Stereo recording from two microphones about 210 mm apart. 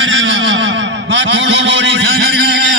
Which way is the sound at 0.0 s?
65° right (ahead or behind).